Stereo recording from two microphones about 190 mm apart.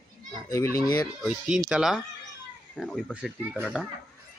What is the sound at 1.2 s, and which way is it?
Speech, centre (ahead or behind).